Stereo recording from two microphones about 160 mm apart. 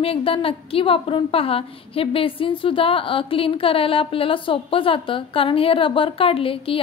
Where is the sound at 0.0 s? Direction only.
35° left (ahead or behind).